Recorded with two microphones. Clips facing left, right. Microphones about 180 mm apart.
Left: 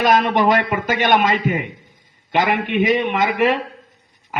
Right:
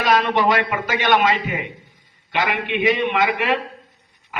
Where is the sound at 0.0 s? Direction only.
50° left (ahead or behind).